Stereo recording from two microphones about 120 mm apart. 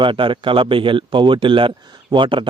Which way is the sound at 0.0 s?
45° right (ahead or behind).